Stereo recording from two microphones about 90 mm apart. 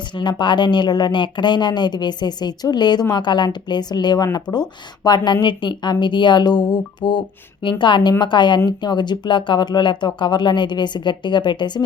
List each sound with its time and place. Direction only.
0.2 s speech: 60° left (ahead or behind)